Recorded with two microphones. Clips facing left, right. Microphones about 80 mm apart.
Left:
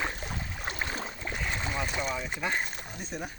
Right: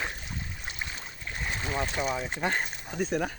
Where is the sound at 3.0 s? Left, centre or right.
Right.